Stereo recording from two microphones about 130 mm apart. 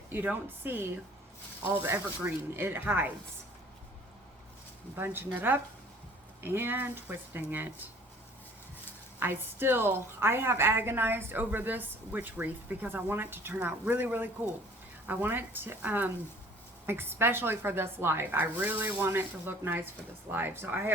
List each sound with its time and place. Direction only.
0.1 s a woman's voice: 15° right (ahead or behind)
4.9 s a woman's voice: 15° right (ahead or behind)
9.2 s a woman's voice: 15° right (ahead or behind)